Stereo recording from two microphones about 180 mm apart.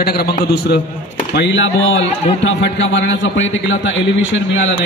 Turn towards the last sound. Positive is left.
turn(degrees=90)